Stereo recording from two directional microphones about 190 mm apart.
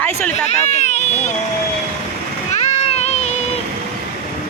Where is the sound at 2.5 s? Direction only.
35° left (ahead or behind).